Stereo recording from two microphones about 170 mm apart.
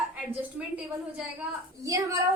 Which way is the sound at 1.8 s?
20° right (ahead or behind).